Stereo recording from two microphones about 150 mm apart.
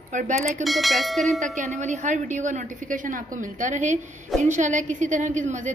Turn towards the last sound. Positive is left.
turn(degrees=-55)  # may be behind; listen again after turning